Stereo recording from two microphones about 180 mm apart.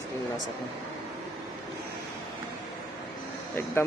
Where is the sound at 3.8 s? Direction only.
15° left (ahead or behind).